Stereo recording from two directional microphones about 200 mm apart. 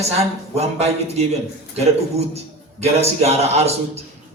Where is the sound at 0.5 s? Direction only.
30° right (ahead or behind).